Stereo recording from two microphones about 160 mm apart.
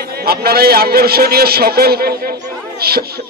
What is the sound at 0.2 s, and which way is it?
Speech, 75° right (ahead or behind).